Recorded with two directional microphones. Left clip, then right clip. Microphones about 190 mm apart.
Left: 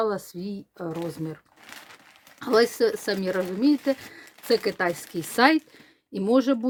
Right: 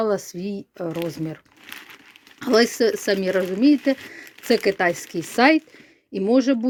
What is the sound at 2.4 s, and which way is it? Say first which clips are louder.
Speech: right 3 dB; 15° right (ahead or behind).